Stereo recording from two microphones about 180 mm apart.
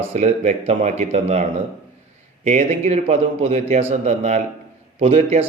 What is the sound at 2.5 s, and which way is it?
Speech, 40° right (ahead or behind).